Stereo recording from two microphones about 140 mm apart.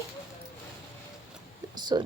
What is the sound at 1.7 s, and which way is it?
Speech, 30° right (ahead or behind).